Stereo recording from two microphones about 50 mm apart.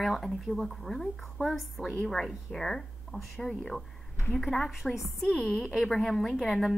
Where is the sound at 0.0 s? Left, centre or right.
Centre.